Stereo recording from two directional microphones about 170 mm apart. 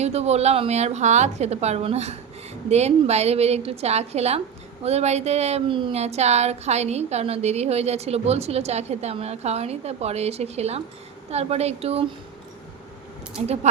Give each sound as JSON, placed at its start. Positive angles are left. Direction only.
{"t": 0.0, "sound": "speech", "side_deg": -40}
{"t": 13.4, "sound": "speech", "side_deg": -40}